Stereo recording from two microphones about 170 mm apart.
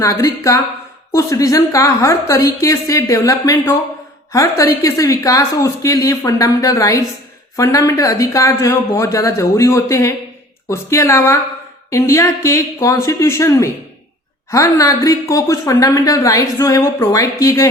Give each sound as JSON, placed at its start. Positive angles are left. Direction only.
{"t": 0.0, "sound": "a man's voice", "side_deg": 20}